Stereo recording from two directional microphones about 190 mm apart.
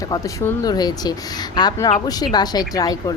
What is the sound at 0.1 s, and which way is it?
Speech, 20° left (ahead or behind).